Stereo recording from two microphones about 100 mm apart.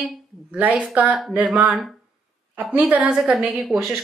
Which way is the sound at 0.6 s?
15° right (ahead or behind).